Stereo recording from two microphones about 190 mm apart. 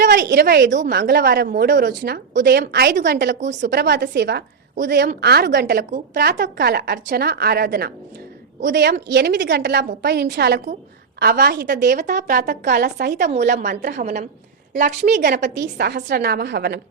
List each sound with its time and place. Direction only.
0.0 s a woman's voice: 65° right (ahead or behind); by 1.9 s 50° right (ahead or behind)
2.0 s a woman's voice: 60° right (ahead or behind)
13.3 s a woman's voice: 40° right (ahead or behind)
15.5 s a woman's voice: 65° right (ahead or behind)